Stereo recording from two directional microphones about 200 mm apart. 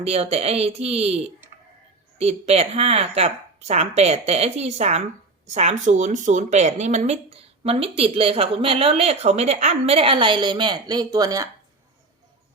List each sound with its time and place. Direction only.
0.0 s speech: 30° right (ahead or behind)